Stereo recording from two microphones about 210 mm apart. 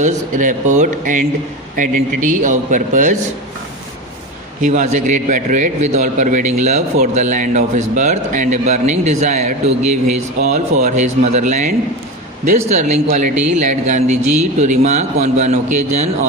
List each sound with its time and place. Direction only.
0.0 s a man's voice: 35° right (ahead or behind)
4.6 s a man's voice: 35° right (ahead or behind)